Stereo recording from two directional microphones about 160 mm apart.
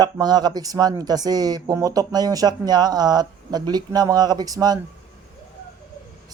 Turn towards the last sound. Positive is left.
turn(degrees=-25)  # may be behind; listen again after turning